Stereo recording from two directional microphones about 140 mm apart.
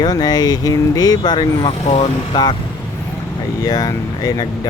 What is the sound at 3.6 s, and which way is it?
Speech, 25° left (ahead or behind).